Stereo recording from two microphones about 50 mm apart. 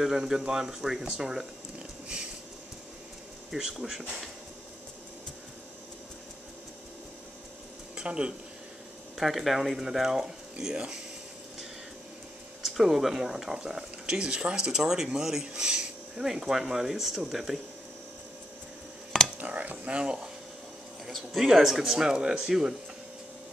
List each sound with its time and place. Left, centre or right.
0.0 s speech: centre
3.5 s speech: centre
7.9 s speech: centre
9.1 s speech: centre
12.6 s speech: centre
19.3 s stir: right
21.0 s speech: centre